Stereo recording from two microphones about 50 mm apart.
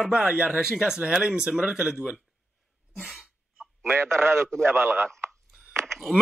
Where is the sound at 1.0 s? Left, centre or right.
Right.